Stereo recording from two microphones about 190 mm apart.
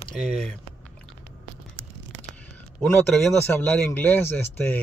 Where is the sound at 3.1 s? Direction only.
Centre (ahead or behind).